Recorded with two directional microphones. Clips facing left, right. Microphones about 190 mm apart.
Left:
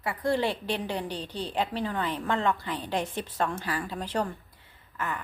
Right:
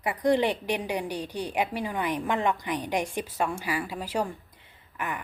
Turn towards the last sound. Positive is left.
turn(degrees=-15)  # may be behind; listen again after turning